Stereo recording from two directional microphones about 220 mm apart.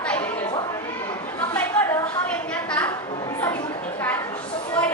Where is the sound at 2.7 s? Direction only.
10° left (ahead or behind).